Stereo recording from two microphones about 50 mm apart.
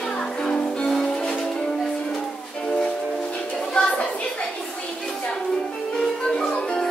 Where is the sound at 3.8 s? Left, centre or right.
Centre.